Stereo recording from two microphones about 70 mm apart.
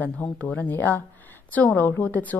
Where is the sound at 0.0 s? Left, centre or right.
Left.